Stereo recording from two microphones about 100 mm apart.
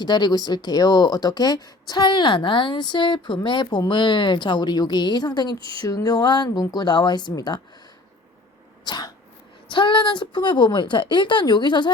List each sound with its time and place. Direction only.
0.0 s speech: 45° left (ahead or behind)
8.8 s sneeze: 45° left (ahead or behind)
9.6 s speech: 55° left (ahead or behind)